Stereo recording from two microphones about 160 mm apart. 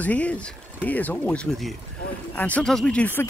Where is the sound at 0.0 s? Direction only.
10° left (ahead or behind).